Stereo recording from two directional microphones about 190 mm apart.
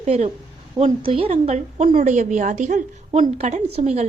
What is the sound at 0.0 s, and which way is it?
A woman's voice, 35° right (ahead or behind).